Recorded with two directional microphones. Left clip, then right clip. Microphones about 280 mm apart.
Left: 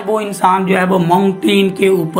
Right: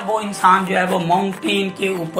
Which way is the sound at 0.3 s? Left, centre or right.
Left.